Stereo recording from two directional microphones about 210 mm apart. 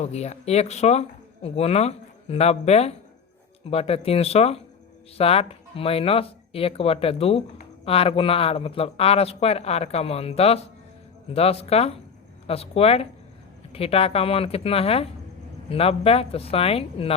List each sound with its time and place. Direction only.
0.0 s speech: 30° left (ahead or behind)